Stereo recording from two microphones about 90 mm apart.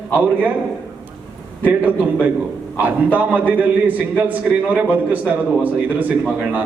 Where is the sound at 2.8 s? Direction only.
20° right (ahead or behind).